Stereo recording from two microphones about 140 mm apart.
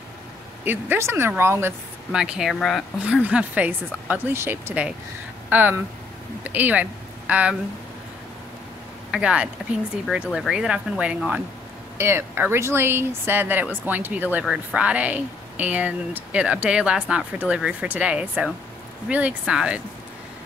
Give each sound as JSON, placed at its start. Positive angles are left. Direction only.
{"t": 0.7, "sound": "speech", "side_deg": -15}
{"t": 2.1, "sound": "speech", "side_deg": -5}
{"t": 9.1, "sound": "speech", "side_deg": -5}